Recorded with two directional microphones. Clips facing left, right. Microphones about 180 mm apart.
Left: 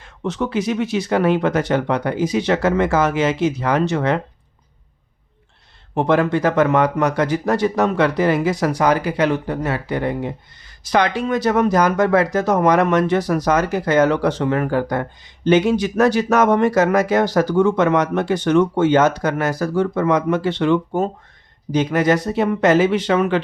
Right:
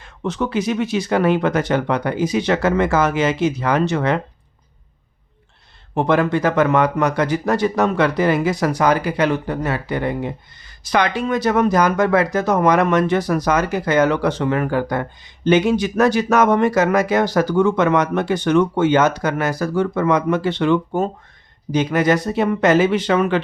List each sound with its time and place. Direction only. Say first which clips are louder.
0.2 s speech: even; 30° left (ahead or behind)
5.9 s speech: even; 30° left (ahead or behind)